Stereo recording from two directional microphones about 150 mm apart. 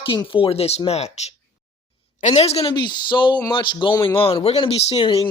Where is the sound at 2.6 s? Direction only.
35° left (ahead or behind).